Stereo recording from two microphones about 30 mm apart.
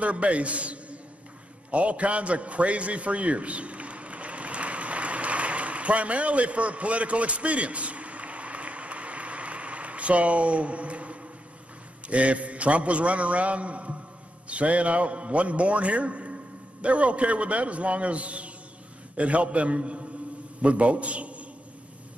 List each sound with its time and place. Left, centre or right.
0.0 s a man's voice: right
1.7 s a sound: right
12.1 s a man's voice: right